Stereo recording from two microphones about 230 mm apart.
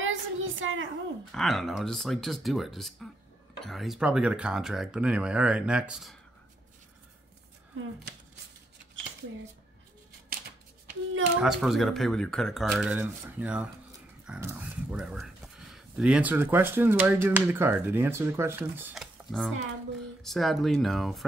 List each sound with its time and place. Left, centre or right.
0.0 s a sound: right
1.3 s speech: centre
11.3 s speech: centre